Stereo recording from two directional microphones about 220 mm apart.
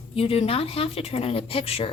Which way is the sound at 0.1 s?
25° left (ahead or behind).